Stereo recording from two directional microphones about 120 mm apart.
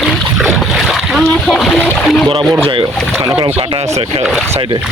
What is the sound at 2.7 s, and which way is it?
Speech, 50° right (ahead or behind).